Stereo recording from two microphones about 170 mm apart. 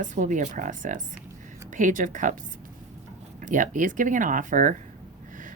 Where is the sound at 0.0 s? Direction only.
50° right (ahead or behind).